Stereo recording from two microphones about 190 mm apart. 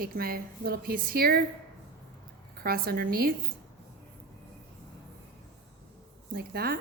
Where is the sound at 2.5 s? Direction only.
55° right (ahead or behind).